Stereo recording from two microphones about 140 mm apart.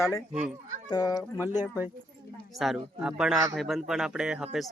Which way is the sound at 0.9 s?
30° left (ahead or behind).